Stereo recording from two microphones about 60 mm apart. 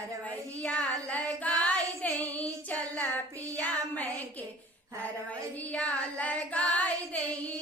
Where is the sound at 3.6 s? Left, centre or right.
Left.